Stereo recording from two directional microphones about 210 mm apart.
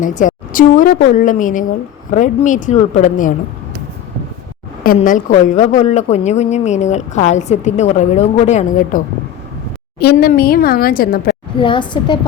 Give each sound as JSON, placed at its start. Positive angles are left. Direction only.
{"t": 0.0, "sound": "a woman's voice", "side_deg": 35}
{"t": 4.9, "sound": "a woman's voice", "side_deg": 40}
{"t": 11.6, "sound": "a woman's voice", "side_deg": 25}